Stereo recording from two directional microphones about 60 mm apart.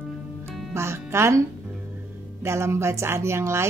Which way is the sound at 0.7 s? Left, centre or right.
Right.